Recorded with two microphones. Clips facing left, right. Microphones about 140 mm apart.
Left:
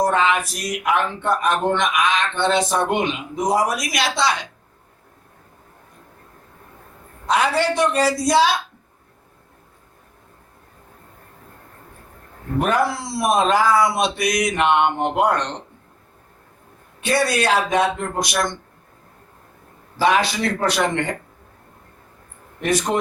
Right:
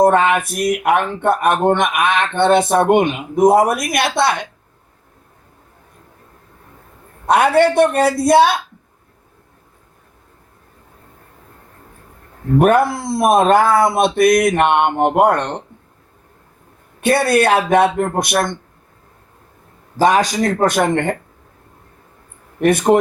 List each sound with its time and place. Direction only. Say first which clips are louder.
0.0 s speech: right 6 dB; 55° right (ahead or behind)
7.3 s speech: right 7 dB; 55° right (ahead or behind)
12.5 s speech: right 7 dB; 55° right (ahead or behind)
17.0 s speech: right 6 dB; 55° right (ahead or behind)
20.0 s speech: right 4 dB; 45° right (ahead or behind)
22.6 s speech: right 8 dB; 55° right (ahead or behind)